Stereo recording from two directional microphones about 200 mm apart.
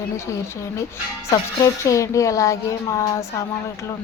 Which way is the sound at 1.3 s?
15° left (ahead or behind).